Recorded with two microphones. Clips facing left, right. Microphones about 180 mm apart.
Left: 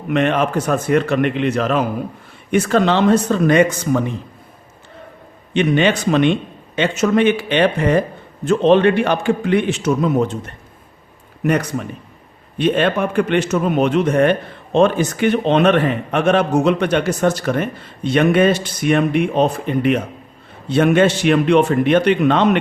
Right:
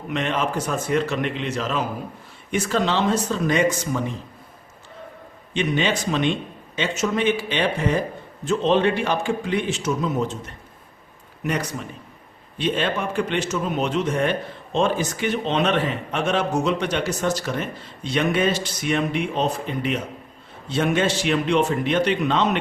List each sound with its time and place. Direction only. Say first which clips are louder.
0.1 s a man's voice: left 7 dB; 60° left (ahead or behind)
5.5 s a man's voice: left 7 dB; 60° left (ahead or behind)